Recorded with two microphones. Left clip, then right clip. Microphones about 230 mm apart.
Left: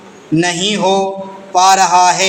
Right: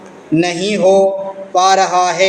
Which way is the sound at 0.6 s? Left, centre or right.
Centre.